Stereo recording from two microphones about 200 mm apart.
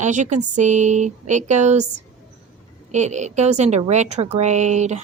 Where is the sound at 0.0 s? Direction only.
35° right (ahead or behind).